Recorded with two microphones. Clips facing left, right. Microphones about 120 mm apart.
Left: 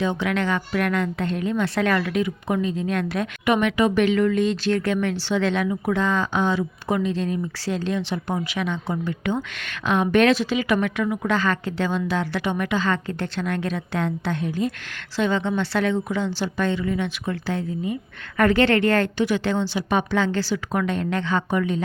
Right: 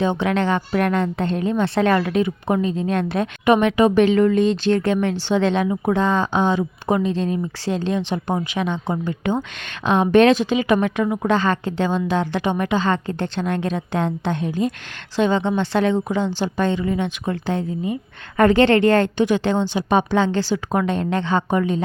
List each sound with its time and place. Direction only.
0.0 s a woman's voice: 25° right (ahead or behind)